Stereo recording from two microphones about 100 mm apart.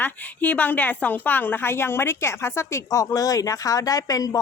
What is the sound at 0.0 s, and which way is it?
A woman's voice, 15° left (ahead or behind).